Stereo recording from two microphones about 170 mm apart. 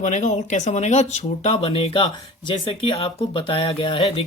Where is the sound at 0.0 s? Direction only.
45° left (ahead or behind).